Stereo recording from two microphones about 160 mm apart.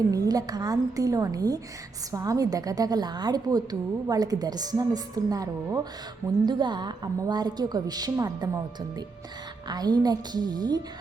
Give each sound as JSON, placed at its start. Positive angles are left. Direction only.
{"t": 0.1, "sound": "a woman's voice", "side_deg": -25}